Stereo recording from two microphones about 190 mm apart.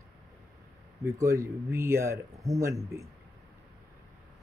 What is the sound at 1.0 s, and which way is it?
Speech, 15° right (ahead or behind).